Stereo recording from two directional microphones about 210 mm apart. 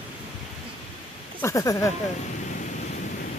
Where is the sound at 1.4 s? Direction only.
15° left (ahead or behind).